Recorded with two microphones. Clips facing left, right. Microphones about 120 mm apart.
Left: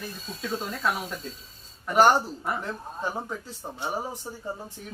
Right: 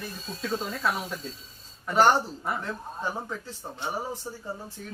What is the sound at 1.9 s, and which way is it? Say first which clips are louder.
Speech: left 1 dB; 15° left (ahead or behind).